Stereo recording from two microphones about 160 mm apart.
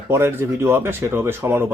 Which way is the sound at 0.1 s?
15° right (ahead or behind).